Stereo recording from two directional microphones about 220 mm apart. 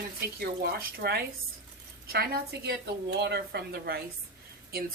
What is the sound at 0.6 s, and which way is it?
A woman's voice, 45° right (ahead or behind).